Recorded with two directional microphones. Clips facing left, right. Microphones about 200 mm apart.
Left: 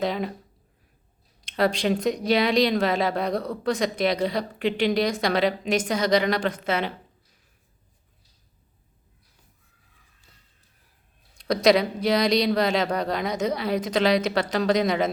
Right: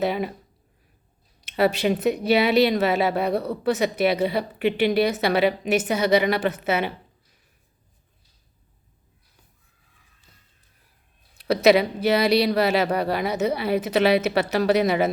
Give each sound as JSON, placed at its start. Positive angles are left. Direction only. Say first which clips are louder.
{"t": 0.0, "sound": "speech", "louder": "right 2 dB", "side_deg": -5}
{"t": 1.4, "sound": "speech", "louder": "right 2 dB", "side_deg": -5}
{"t": 11.3, "sound": "speech", "louder": "right 2 dB", "side_deg": -5}